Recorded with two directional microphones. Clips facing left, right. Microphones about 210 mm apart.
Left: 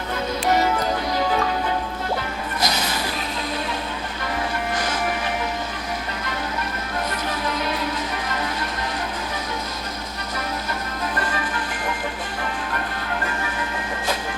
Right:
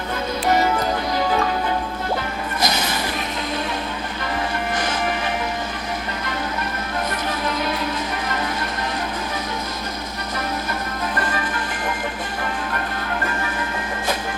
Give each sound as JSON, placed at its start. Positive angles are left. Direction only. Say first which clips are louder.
{"t": 2.6, "sound": "music", "louder": "right 2 dB", "side_deg": -50}